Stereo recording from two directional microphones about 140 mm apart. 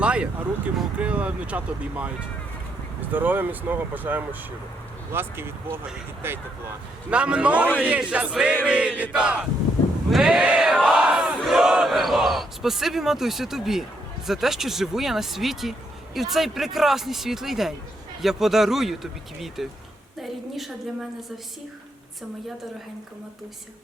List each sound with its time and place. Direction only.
0.0 s speech: 10° right (ahead or behind)
10.8 s battle cry: 5° right (ahead or behind)
14.3 s speech: centre (ahead or behind)